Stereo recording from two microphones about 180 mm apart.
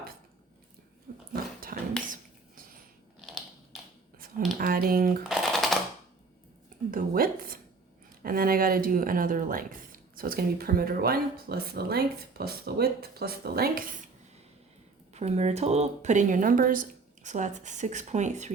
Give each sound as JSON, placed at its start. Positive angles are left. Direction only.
{"t": 1.3, "sound": "dog", "side_deg": -50}
{"t": 3.2, "sound": "typing", "side_deg": 0}
{"t": 4.5, "sound": "speech", "side_deg": -55}
{"t": 5.3, "sound": "shuffling cards", "side_deg": 0}
{"t": 6.9, "sound": "a sound", "side_deg": -55}
{"t": 10.2, "sound": "speech", "side_deg": -55}
{"t": 15.1, "sound": "speech", "side_deg": -35}